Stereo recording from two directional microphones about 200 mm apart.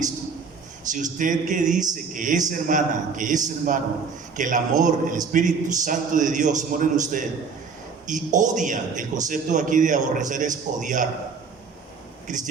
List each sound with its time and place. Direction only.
0.9 s a man's voice: 40° right (ahead or behind)
12.3 s a man's voice: 40° right (ahead or behind)